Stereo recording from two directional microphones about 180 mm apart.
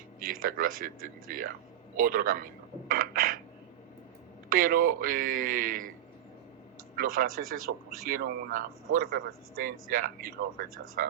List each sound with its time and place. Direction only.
0.2 s speech: 50° right (ahead or behind)
2.9 s a sound: 50° right (ahead or behind)
4.4 s speech: 55° right (ahead or behind)
6.9 s speech: 55° right (ahead or behind)